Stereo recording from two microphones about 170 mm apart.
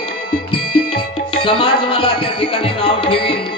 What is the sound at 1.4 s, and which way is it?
Music, 30° left (ahead or behind).